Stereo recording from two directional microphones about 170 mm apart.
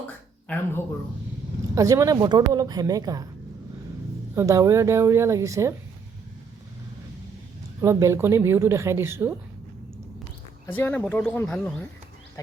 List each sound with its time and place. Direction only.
0.4 s a sound: 10° left (ahead or behind)
1.7 s speech: 20° right (ahead or behind)
4.4 s a woman's voice: 20° right (ahead or behind)
7.8 s a woman's voice: 15° right (ahead or behind)
10.7 s speech: 10° left (ahead or behind)